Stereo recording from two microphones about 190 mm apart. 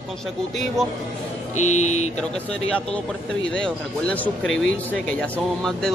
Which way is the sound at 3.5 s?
5° left (ahead or behind).